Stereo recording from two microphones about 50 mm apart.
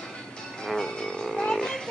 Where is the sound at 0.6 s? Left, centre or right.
Centre.